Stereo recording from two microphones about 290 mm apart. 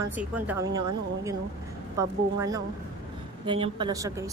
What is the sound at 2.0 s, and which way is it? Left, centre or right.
A woman's voice, centre.